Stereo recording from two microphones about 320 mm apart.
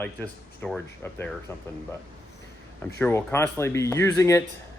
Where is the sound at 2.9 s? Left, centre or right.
Centre.